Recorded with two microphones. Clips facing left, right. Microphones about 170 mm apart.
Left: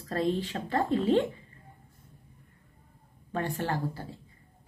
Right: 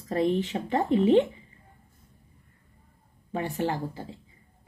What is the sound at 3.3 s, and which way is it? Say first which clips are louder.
Speech: right 3 dB; 15° right (ahead or behind).